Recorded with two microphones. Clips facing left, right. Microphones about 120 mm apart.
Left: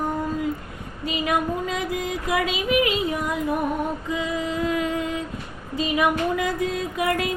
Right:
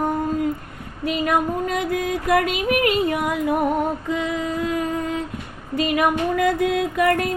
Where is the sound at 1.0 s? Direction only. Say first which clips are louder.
Right 3 dB; 55° right (ahead or behind).